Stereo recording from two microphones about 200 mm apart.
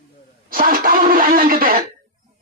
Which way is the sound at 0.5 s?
45° right (ahead or behind).